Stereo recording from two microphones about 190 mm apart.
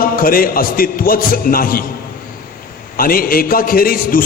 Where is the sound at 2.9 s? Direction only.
50° left (ahead or behind).